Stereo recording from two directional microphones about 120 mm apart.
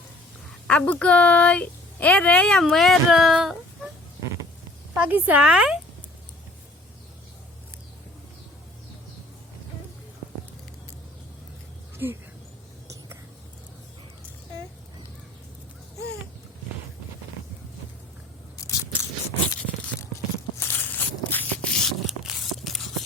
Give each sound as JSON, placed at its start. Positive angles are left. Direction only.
{"t": 0.7, "sound": "a woman's voice", "side_deg": 10}
{"t": 4.9, "sound": "speech", "side_deg": -15}
{"t": 12.0, "sound": "speech", "side_deg": -20}
{"t": 18.6, "sound": "keys jangling", "side_deg": 25}
{"t": 20.6, "sound": "a sound", "side_deg": 20}